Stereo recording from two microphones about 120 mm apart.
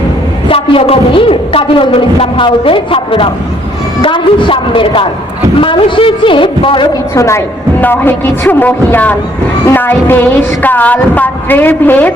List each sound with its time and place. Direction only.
0.5 s a woman's voice: 50° left (ahead or behind)
7.1 s a woman's voice: 25° left (ahead or behind)